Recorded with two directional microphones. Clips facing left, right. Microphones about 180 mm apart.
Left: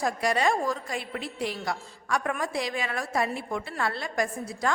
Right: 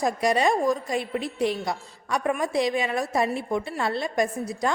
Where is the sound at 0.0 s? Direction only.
20° right (ahead or behind).